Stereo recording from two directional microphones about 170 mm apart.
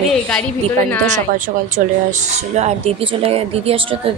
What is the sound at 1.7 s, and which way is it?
Speech, 45° right (ahead or behind).